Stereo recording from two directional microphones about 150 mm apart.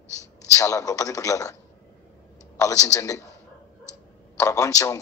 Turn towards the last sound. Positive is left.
turn(degrees=20)  # may be behind; listen again after turning